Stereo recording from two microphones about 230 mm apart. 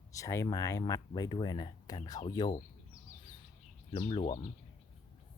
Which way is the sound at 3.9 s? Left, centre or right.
Left.